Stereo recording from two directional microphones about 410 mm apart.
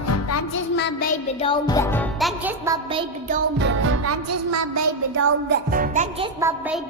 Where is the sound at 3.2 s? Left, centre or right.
Right.